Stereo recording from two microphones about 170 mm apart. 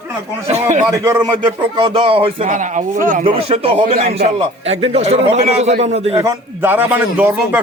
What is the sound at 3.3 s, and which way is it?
A man's voice, 40° right (ahead or behind).